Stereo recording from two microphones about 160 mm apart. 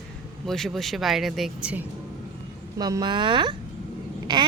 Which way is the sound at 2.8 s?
25° right (ahead or behind).